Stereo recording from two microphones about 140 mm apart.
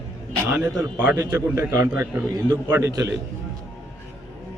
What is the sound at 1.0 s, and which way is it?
A man's voice, 20° right (ahead or behind).